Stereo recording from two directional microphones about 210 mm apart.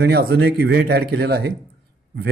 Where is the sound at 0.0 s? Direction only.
50° right (ahead or behind).